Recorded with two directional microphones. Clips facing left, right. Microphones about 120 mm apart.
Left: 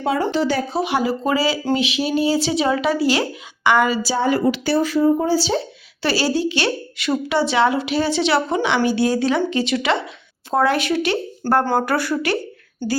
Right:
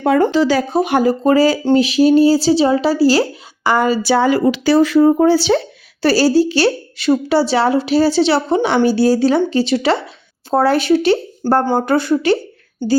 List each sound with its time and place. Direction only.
0.0 s speech: 55° right (ahead or behind)
0.3 s speech: 90° right
0.7 s a woman's voice: 50° right (ahead or behind)
4.0 s speech: 85° right; by 5.6 s 70° right (ahead or behind)
6.0 s a woman's voice: 40° right (ahead or behind)